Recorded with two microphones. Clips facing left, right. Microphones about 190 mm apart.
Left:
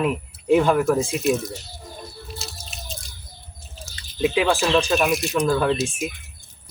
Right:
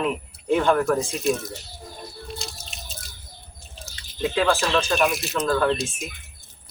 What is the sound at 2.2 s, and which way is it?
Drip, 5° left (ahead or behind).